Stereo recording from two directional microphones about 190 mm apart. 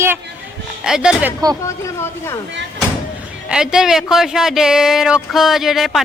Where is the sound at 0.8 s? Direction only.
5° right (ahead or behind).